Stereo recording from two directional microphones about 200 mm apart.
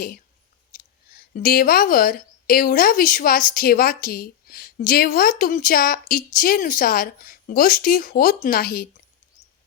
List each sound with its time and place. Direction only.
1.1 s a woman's voice: 45° left (ahead or behind)